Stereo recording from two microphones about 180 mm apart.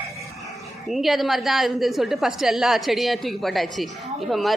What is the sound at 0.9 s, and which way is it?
A woman's voice, centre (ahead or behind).